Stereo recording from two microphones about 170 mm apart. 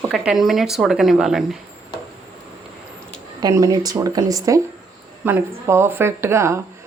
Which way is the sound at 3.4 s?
20° right (ahead or behind).